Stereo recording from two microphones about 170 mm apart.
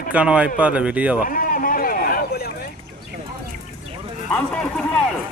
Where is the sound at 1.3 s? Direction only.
55° left (ahead or behind).